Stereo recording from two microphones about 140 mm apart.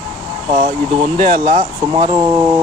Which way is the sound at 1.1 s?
55° right (ahead or behind).